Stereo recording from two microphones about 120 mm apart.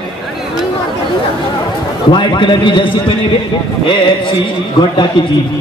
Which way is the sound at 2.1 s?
45° left (ahead or behind).